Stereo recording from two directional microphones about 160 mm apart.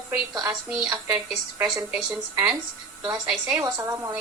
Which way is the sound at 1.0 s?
5° right (ahead or behind).